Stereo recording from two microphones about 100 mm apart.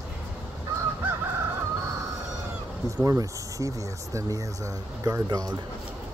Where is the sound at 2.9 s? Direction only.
35° right (ahead or behind).